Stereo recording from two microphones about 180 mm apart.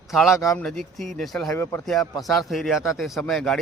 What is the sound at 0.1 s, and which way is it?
Speech, centre (ahead or behind).